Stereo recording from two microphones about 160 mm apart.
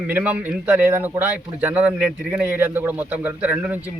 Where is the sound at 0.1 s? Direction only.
10° right (ahead or behind).